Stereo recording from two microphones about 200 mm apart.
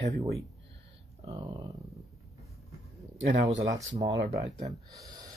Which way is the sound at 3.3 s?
60° right (ahead or behind).